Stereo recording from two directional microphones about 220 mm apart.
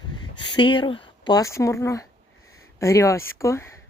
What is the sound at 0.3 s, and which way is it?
Speech, 20° left (ahead or behind).